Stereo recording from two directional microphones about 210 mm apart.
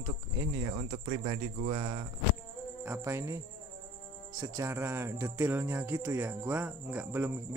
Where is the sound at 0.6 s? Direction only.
25° right (ahead or behind).